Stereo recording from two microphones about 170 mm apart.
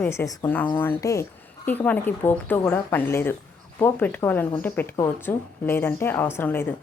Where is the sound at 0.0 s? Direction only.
15° left (ahead or behind).